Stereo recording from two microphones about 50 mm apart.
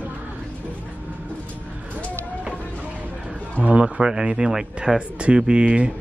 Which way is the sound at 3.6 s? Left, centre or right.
Right.